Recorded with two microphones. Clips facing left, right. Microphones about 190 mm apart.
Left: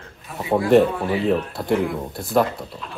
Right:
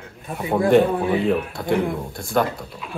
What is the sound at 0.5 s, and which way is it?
Speech, 5° left (ahead or behind).